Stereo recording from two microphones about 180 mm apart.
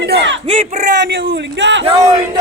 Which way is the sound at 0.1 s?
75° right (ahead or behind).